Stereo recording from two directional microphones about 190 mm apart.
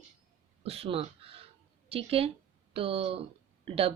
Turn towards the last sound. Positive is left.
turn(degrees=-30)  # may be behind; listen again after turning